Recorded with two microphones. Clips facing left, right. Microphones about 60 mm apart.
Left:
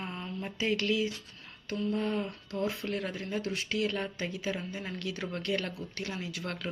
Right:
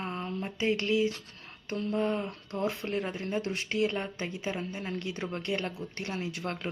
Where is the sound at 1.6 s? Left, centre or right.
Right.